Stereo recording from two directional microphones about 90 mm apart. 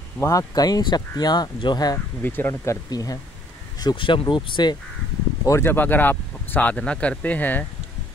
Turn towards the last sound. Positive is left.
turn(degrees=20)  # may be behind; listen again after turning